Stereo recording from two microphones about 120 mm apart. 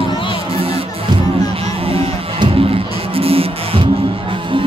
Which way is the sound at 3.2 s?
50° right (ahead or behind).